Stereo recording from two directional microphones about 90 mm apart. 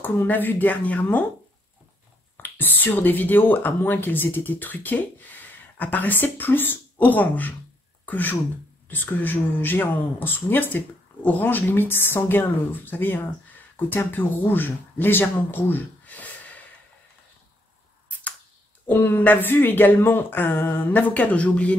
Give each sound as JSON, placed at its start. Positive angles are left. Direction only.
{"t": 0.0, "sound": "speech", "side_deg": 20}
{"t": 2.4, "sound": "speech", "side_deg": 20}
{"t": 18.9, "sound": "speech", "side_deg": 20}